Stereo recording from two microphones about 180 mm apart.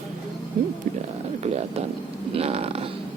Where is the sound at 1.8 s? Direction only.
35° right (ahead or behind).